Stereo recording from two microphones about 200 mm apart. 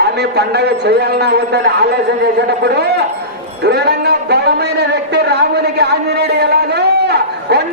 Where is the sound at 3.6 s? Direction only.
55° right (ahead or behind).